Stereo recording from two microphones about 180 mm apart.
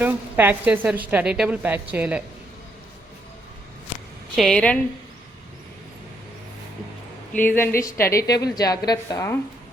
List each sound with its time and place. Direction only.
0.0 s a woman's voice: 10° right (ahead or behind)
4.4 s a woman's voice: 5° left (ahead or behind)
7.3 s a woman's voice: 10° left (ahead or behind)